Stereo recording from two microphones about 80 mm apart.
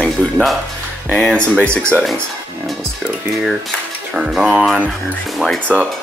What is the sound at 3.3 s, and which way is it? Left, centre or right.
Speech, centre.